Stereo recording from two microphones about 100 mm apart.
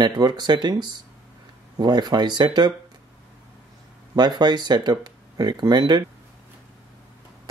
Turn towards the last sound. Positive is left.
turn(degrees=-45)  # may be behind; listen again after turning